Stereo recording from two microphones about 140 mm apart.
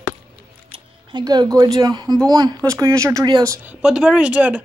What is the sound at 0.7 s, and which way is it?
Speech, 30° right (ahead or behind).